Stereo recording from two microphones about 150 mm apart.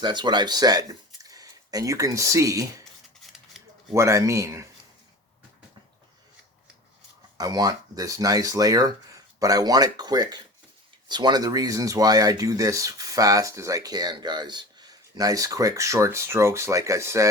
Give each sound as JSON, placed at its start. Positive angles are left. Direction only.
{"t": 0.0, "sound": "speech", "side_deg": -30}
{"t": 3.9, "sound": "speech", "side_deg": -20}
{"t": 7.3, "sound": "speech", "side_deg": -25}